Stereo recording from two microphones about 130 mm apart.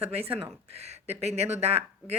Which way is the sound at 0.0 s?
50° right (ahead or behind).